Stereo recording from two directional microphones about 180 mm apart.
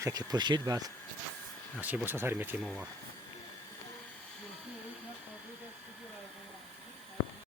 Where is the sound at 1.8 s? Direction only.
10° right (ahead or behind).